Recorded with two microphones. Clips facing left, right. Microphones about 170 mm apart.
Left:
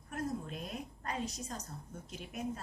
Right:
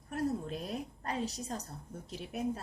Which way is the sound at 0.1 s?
35° right (ahead or behind).